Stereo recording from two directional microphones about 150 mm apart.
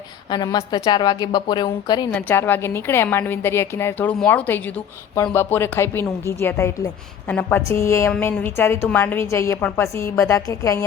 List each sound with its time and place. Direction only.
0.3 s a woman's voice: 30° left (ahead or behind)
2.1 s a woman's voice: 15° left (ahead or behind)